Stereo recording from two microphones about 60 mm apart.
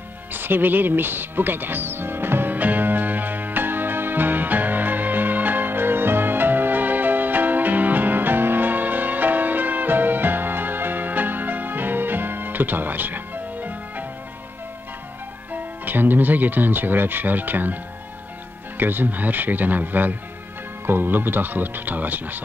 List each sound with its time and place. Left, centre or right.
0.3 s music: right
15.5 s speech: right
18.8 s speech: right